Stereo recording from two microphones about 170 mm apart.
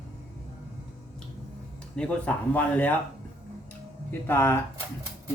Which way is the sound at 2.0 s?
5° left (ahead or behind).